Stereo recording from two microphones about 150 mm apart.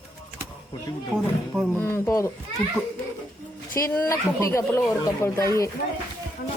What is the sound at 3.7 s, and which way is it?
Speech, 20° left (ahead or behind).